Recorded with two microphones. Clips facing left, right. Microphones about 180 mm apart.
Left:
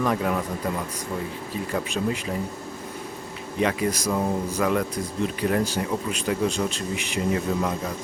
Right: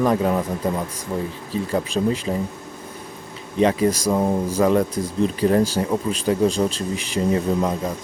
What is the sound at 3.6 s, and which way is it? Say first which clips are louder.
Speech: right 6 dB; 30° right (ahead or behind).